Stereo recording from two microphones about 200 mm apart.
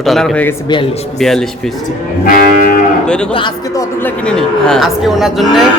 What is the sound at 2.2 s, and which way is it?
Music, 45° left (ahead or behind).